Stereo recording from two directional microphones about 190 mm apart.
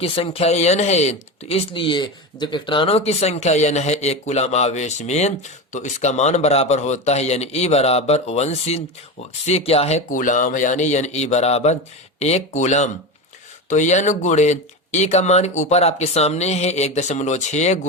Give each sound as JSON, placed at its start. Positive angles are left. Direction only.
{"t": 0.0, "sound": "speech", "side_deg": 30}